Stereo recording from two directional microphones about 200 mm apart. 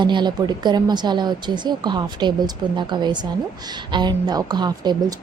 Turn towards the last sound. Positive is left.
turn(degrees=-20)  # may be behind; listen again after turning